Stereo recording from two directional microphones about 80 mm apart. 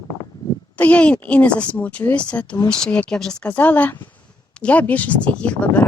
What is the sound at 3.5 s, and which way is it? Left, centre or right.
Speech, left.